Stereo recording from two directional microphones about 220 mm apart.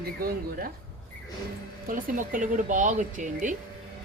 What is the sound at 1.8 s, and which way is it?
Speech, 40° right (ahead or behind).